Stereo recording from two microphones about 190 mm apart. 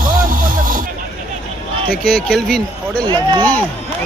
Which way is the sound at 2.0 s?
5° left (ahead or behind).